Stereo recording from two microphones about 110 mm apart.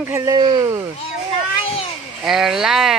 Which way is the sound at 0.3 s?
45° right (ahead or behind).